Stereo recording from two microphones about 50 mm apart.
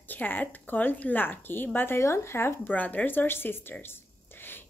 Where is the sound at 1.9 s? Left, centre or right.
Left.